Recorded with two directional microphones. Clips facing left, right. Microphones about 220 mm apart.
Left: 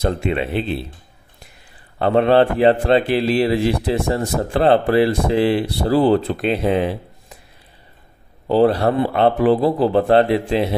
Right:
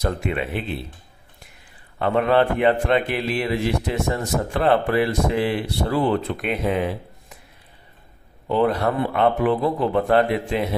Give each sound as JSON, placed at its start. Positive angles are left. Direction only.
{"t": 0.0, "sound": "speech", "side_deg": 25}
{"t": 2.0, "sound": "speech", "side_deg": 30}
{"t": 8.5, "sound": "speech", "side_deg": 35}